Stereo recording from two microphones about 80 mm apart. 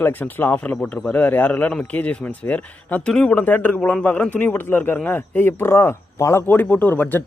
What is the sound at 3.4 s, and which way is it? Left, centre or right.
Speech, left.